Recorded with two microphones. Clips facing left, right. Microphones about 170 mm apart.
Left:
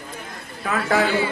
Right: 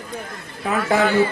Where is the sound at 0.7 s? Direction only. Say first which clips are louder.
Right 2 dB; 20° right (ahead or behind).